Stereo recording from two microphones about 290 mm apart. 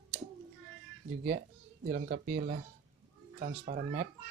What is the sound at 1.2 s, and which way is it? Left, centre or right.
A child's voice, right.